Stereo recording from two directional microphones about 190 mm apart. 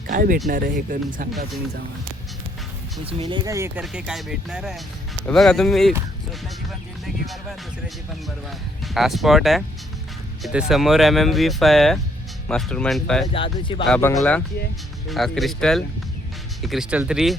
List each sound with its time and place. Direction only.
0.1 s speech: 45° right (ahead or behind)
3.0 s speech: 30° right (ahead or behind); by 7.3 s centre (ahead or behind)
8.9 s speech: centre (ahead or behind)
13.3 s speech: 25° left (ahead or behind)
13.8 s speech: 5° left (ahead or behind)